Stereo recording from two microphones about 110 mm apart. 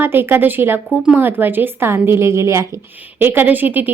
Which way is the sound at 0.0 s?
20° right (ahead or behind).